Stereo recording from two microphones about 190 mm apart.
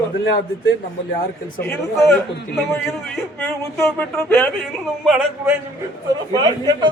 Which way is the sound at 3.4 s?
5° left (ahead or behind).